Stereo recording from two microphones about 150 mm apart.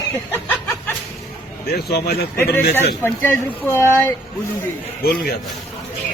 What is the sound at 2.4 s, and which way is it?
A man's voice, 15° left (ahead or behind).